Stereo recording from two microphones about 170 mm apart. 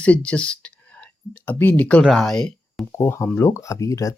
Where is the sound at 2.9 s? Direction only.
15° left (ahead or behind).